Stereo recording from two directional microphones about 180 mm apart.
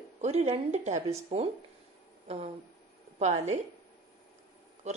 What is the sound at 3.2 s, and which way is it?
Speech, 40° right (ahead or behind).